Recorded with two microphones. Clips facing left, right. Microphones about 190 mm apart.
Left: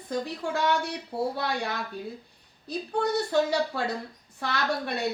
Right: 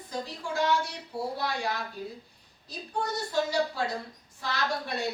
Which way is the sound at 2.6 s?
65° left (ahead or behind).